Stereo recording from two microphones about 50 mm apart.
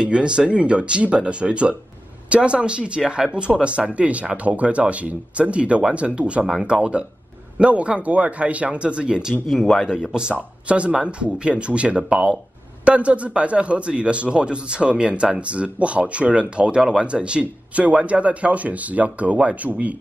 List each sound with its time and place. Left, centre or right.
0.0 s a man's voice: centre